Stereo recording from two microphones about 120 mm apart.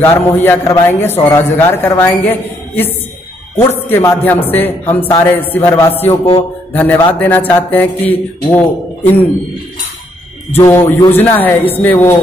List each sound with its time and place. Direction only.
0.0 s a man's voice: 20° left (ahead or behind)
10.5 s a man's voice: 20° left (ahead or behind)